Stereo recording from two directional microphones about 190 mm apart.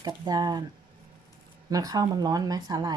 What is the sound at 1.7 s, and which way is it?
Speech, 20° right (ahead or behind).